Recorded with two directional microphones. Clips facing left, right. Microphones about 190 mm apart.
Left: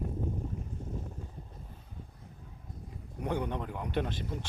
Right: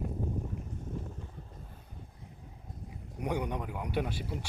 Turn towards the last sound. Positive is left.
turn(degrees=-10)  # may be behind; listen again after turning